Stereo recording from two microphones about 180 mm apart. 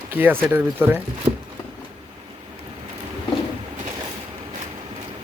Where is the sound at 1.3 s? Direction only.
30° right (ahead or behind).